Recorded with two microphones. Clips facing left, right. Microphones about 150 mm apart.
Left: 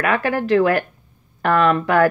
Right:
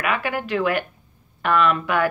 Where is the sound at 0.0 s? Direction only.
40° left (ahead or behind).